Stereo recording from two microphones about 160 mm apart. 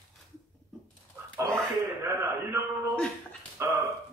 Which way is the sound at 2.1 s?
15° right (ahead or behind).